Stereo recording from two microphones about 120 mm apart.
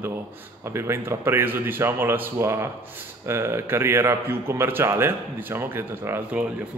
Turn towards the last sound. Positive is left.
turn(degrees=-20)  # may be behind; listen again after turning